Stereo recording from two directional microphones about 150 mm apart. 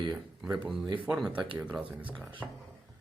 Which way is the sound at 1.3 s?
35° right (ahead or behind).